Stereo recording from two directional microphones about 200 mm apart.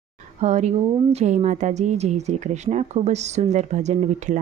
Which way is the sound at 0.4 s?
35° right (ahead or behind).